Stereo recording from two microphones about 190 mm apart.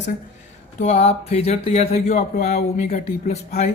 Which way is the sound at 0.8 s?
35° left (ahead or behind).